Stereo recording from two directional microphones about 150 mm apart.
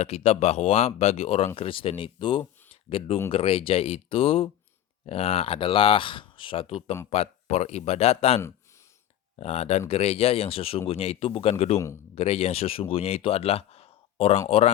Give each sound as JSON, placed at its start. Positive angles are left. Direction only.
{"t": 0.0, "sound": "speech", "side_deg": 45}